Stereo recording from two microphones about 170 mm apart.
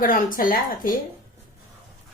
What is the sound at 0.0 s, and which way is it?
Speech, 55° left (ahead or behind).